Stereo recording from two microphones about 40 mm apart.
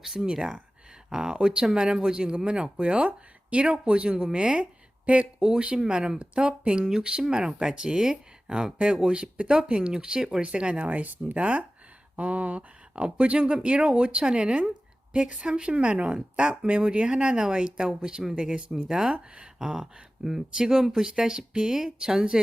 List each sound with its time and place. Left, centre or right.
0.0 s speech: centre; by 5.3 s right
5.4 s speech: right
10.0 s speech: centre
10.4 s speech: right
10.8 s speech: right
11.3 s speech: right; by 22.4 s centre